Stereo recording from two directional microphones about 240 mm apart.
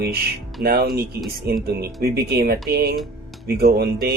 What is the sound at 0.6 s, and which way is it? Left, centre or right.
Speech, right.